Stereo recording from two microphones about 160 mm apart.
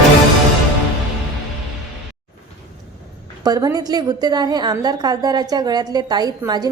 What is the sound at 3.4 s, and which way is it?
A woman's voice, 25° right (ahead or behind).